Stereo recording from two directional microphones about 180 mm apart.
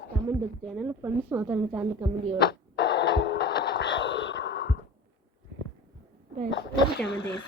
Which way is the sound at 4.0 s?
90° left.